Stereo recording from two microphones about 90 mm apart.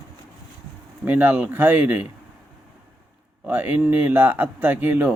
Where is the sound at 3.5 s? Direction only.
20° right (ahead or behind).